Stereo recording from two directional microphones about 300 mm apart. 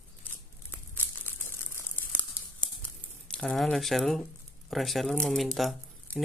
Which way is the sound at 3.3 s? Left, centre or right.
Centre.